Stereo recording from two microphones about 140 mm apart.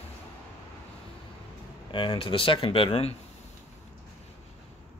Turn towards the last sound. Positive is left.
turn(degrees=40)  # may be behind; listen again after turning